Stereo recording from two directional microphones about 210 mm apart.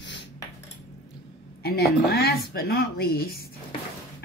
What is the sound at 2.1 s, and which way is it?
A woman's voice, 50° left (ahead or behind).